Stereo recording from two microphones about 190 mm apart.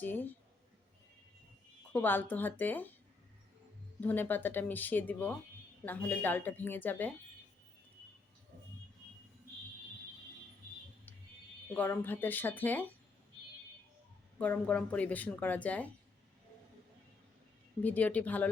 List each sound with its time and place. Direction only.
0.0 s speech: 10° left (ahead or behind)
1.9 s speech: 10° left (ahead or behind)
4.0 s speech: 10° left (ahead or behind)
11.7 s speech: 10° left (ahead or behind)
14.3 s speech: 5° left (ahead or behind)
17.8 s speech: 10° left (ahead or behind)